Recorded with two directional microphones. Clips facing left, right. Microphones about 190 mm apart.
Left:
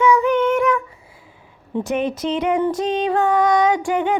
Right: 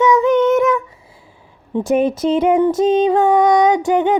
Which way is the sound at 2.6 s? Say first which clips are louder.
Right 6 dB; 25° right (ahead or behind).